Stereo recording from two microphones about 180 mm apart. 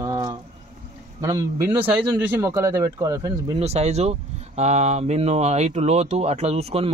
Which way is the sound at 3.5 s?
35° right (ahead or behind).